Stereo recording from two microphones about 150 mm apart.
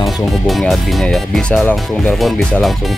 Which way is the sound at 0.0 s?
Centre (ahead or behind).